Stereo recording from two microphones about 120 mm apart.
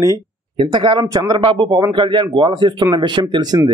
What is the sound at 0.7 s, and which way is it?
Speech, 40° right (ahead or behind).